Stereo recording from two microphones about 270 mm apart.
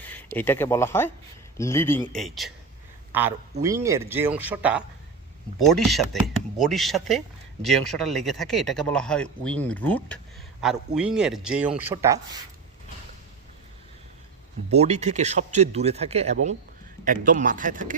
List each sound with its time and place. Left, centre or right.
0.3 s a man's voice: centre
14.7 s speech: right